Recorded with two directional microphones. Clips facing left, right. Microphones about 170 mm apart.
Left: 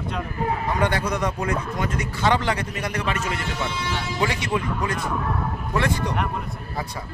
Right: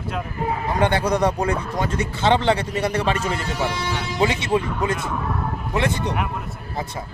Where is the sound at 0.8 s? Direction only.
30° right (ahead or behind).